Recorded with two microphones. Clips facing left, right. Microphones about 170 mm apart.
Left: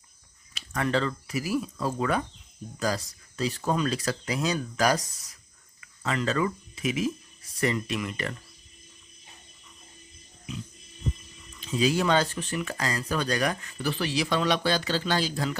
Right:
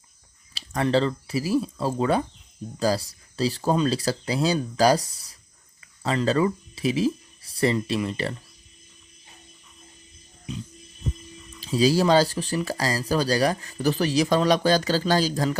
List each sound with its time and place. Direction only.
0.5 s speech: 30° right (ahead or behind)
11.6 s speech: 35° right (ahead or behind)